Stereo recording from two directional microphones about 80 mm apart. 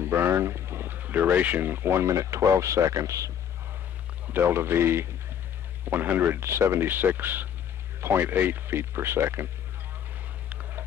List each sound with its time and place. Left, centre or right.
0.0 s speech: right
4.3 s speech: right
10.5 s a sound: right